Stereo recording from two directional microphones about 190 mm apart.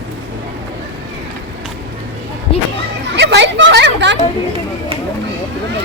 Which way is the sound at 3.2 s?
65° right (ahead or behind).